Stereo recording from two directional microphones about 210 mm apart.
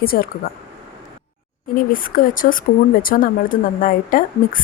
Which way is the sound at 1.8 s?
40° left (ahead or behind).